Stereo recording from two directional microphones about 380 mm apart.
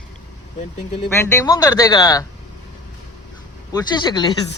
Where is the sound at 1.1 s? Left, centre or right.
Centre.